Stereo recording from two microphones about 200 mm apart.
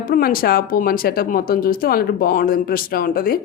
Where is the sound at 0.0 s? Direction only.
45° left (ahead or behind).